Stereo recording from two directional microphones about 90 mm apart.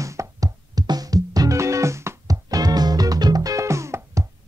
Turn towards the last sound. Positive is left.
turn(degrees=-35)  # may be behind; listen again after turning